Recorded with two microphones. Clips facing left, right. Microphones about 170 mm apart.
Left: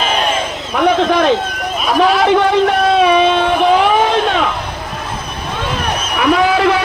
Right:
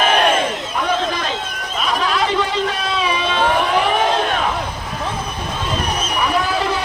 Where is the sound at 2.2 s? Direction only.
60° left (ahead or behind).